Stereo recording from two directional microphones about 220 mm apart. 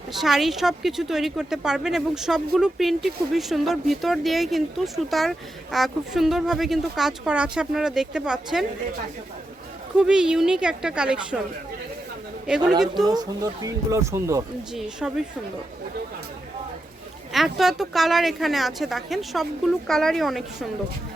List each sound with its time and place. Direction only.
0.1 s speech: centre (ahead or behind)
10.0 s speech: 5° right (ahead or behind)
12.9 s speech: 15° right (ahead or behind)
14.7 s speech: 5° right (ahead or behind)
17.3 s speech: centre (ahead or behind)